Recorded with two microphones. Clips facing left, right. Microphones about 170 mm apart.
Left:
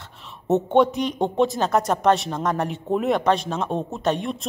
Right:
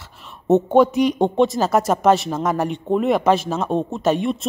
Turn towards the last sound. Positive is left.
turn(degrees=0)  # may be behind; listen again after turning